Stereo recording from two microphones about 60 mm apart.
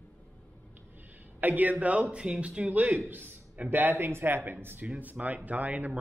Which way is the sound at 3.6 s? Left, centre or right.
Right.